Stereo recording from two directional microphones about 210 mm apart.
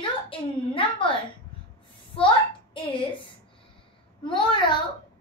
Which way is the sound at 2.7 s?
25° left (ahead or behind).